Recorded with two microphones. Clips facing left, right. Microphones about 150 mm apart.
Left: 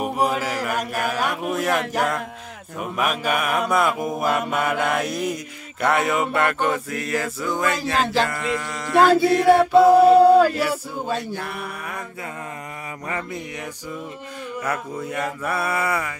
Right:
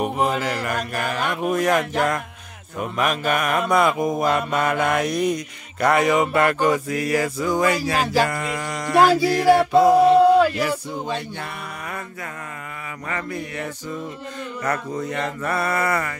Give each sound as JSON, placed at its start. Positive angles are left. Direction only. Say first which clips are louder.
{"t": 0.0, "sound": "mantra", "louder": "right 1 dB", "side_deg": 5}
{"t": 13.1, "sound": "music", "louder": "right 2 dB", "side_deg": 20}
{"t": 14.6, "sound": "mantra", "louder": "right 2 dB", "side_deg": 10}